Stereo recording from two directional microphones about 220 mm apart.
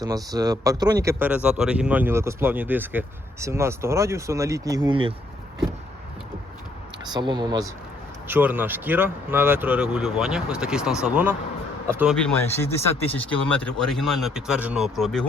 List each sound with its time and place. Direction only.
0.0 s speech: 15° right (ahead or behind)
7.0 s speech: 20° right (ahead or behind)
12.1 s speech: 10° left (ahead or behind)